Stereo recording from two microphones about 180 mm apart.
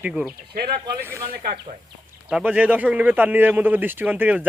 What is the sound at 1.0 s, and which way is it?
Speech, 15° right (ahead or behind).